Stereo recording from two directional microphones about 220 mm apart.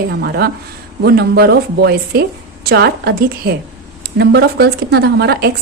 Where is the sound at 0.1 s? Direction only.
45° right (ahead or behind).